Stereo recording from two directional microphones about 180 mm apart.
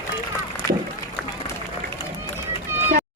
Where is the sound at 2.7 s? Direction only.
15° right (ahead or behind).